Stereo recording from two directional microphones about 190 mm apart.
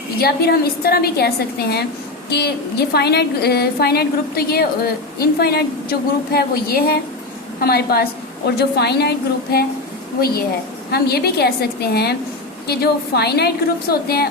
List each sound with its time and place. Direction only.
0.2 s a woman's voice: 55° left (ahead or behind)